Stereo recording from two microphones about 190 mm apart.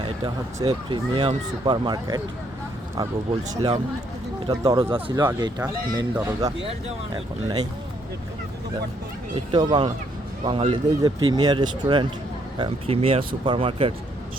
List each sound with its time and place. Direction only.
0.6 s speech: 20° right (ahead or behind)
3.5 s speech: 20° right (ahead or behind)
9.3 s speech: 25° right (ahead or behind)